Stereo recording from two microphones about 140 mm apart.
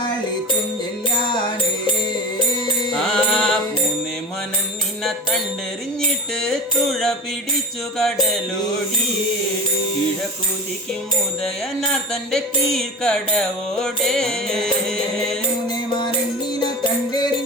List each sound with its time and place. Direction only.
2.9 s mantra: 5° left (ahead or behind)
6.3 s music: 5° left (ahead or behind)
11.4 s music: 5° left (ahead or behind)
15.7 s music: 35° left (ahead or behind)